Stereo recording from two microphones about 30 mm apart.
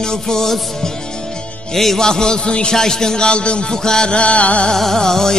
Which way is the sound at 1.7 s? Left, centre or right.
Centre.